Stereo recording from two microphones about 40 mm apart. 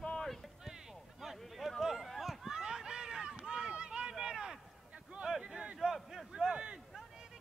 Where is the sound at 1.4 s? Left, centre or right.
Centre.